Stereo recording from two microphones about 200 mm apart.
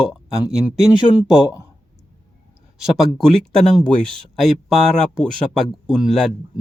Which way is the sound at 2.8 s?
Centre (ahead or behind).